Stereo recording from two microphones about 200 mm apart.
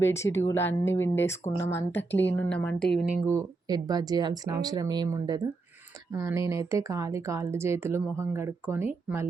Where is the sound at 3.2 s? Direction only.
15° right (ahead or behind).